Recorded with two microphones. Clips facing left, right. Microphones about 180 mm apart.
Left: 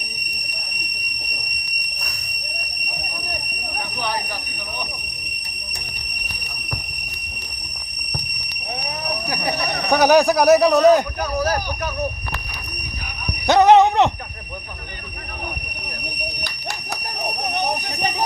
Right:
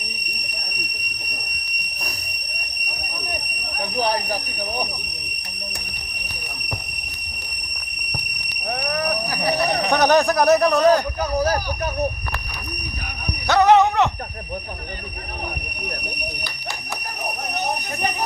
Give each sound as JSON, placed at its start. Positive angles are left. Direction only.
{"t": 9.9, "sound": "speech", "side_deg": 5}
{"t": 11.4, "sound": "speech", "side_deg": -30}
{"t": 13.5, "sound": "a sound", "side_deg": 20}